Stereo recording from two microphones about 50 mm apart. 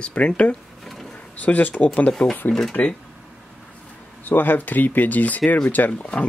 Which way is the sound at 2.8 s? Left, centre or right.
Left.